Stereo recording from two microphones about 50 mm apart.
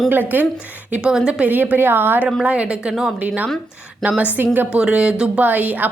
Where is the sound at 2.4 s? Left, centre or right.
Right.